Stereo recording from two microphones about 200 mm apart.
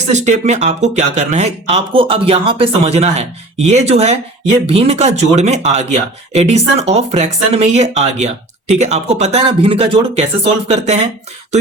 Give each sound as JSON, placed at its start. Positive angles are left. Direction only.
{"t": 0.1, "sound": "speech", "side_deg": -35}